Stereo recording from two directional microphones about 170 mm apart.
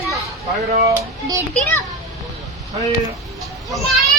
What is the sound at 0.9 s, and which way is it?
Speech, 20° right (ahead or behind).